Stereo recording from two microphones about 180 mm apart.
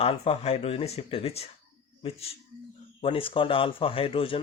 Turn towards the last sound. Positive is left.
turn(degrees=30)  # may be behind; listen again after turning